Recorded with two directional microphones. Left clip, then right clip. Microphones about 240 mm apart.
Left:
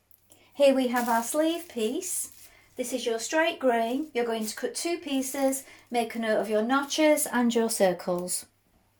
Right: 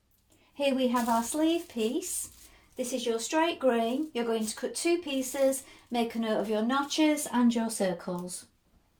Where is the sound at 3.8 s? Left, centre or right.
Centre.